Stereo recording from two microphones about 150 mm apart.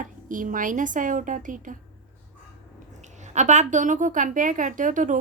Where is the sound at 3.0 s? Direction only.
50° right (ahead or behind).